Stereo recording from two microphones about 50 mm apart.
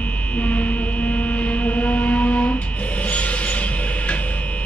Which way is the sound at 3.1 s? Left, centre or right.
Left.